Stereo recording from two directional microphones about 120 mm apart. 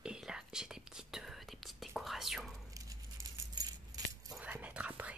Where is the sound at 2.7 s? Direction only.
30° right (ahead or behind).